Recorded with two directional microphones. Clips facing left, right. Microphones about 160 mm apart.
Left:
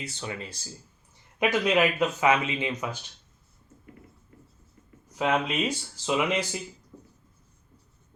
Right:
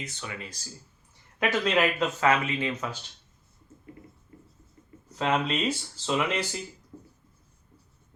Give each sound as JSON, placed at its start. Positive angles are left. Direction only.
{"t": 0.0, "sound": "speech", "side_deg": 30}
{"t": 1.4, "sound": "speech", "side_deg": 15}
{"t": 5.1, "sound": "speech", "side_deg": 10}